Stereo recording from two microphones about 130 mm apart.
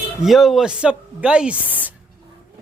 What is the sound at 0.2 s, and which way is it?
Speech, centre (ahead or behind).